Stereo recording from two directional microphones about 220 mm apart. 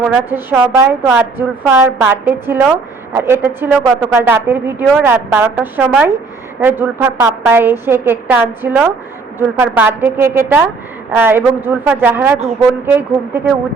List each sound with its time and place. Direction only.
0.1 s a woman's voice: 5° right (ahead or behind)